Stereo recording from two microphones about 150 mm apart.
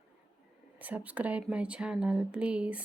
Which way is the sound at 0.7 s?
10° right (ahead or behind).